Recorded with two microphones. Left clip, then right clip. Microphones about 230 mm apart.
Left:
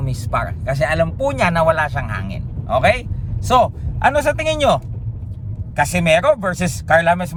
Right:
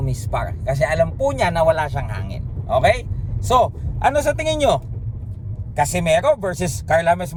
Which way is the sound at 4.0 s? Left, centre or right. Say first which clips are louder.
Left 2 dB; centre.